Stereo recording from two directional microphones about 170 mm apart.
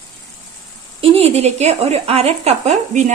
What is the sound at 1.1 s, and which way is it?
Speech, 40° right (ahead or behind).